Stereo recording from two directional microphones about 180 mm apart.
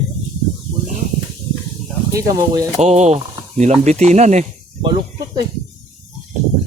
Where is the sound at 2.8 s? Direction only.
40° right (ahead or behind).